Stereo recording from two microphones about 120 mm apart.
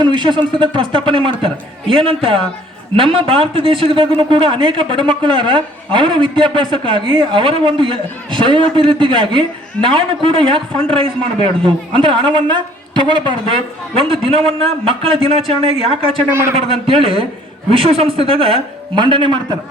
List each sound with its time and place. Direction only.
0.0 s a man's voice: 40° right (ahead or behind)